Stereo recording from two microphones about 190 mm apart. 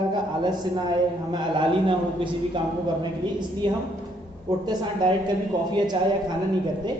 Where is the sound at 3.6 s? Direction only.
25° right (ahead or behind).